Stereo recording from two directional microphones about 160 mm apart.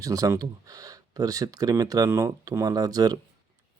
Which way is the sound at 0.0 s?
20° right (ahead or behind).